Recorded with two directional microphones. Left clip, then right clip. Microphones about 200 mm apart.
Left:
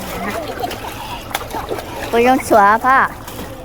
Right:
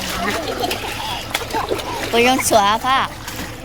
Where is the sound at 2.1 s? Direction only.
20° left (ahead or behind).